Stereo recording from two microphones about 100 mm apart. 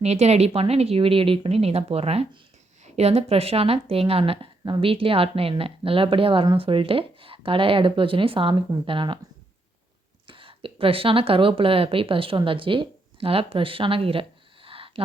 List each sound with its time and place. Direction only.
0.0 s speech: 90° right; by 9.1 s 55° right (ahead or behind)
10.2 s speech: 60° right (ahead or behind)